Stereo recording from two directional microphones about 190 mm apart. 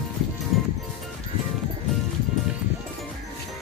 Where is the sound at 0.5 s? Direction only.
Centre (ahead or behind).